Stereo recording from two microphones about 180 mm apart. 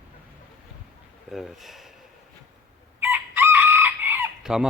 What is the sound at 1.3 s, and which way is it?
Speech, centre (ahead or behind).